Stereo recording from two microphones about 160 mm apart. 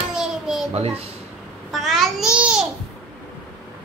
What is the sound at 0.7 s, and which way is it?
Speech, 40° right (ahead or behind).